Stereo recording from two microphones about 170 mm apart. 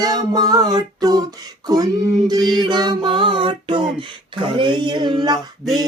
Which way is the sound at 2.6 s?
25° right (ahead or behind).